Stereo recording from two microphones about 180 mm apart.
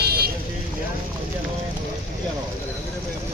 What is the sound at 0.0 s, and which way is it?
Vehicle, 60° right (ahead or behind).